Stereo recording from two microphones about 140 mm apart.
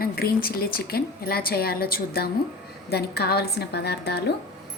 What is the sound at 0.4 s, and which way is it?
A woman's voice, 90° left.